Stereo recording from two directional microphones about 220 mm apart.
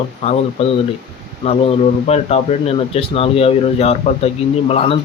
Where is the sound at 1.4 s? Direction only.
30° left (ahead or behind).